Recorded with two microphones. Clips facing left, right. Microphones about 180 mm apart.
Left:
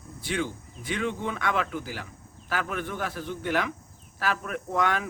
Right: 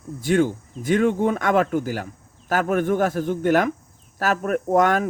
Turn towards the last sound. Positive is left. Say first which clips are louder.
# right 9 dB
turn(degrees=-45)  # may be behind; listen again after turning